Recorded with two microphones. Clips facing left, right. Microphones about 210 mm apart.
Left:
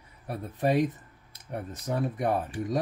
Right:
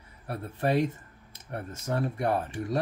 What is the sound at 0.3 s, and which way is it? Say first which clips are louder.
Speech: left 1 dB; 15° left (ahead or behind).